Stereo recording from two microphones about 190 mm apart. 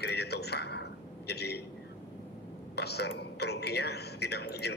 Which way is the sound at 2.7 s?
60° left (ahead or behind).